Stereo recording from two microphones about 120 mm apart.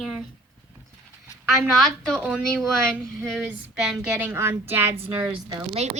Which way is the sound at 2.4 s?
5° left (ahead or behind).